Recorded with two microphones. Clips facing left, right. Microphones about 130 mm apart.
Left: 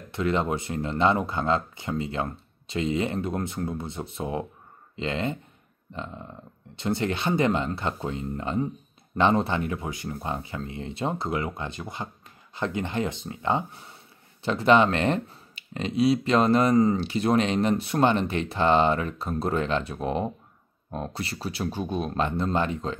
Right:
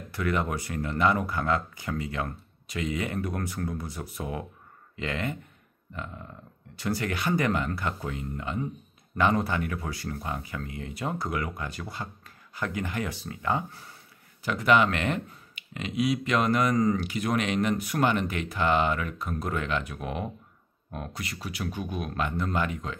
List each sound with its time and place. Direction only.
0.1 s speech: 25° left (ahead or behind)